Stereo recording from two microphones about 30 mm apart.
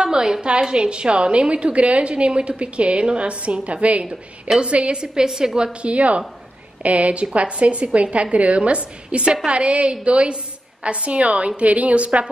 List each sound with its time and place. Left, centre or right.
0.0 s a sound: right
0.4 s a woman's voice: right
5.0 s a woman's voice: right
5.7 s a woman's voice: right